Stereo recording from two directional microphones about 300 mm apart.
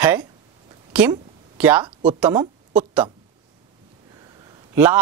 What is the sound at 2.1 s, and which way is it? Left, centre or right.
Speech, centre.